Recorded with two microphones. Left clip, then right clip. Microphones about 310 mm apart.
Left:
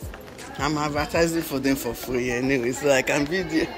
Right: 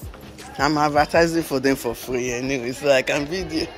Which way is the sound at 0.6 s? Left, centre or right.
Centre.